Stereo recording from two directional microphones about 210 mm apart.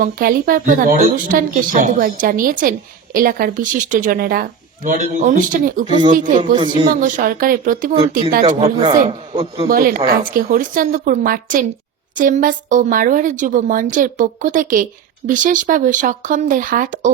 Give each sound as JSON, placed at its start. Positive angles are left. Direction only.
{"t": 0.0, "sound": "a woman's voice", "side_deg": -40}
{"t": 8.6, "sound": "a man's voice", "side_deg": -25}
{"t": 9.6, "sound": "a woman's voice", "side_deg": -45}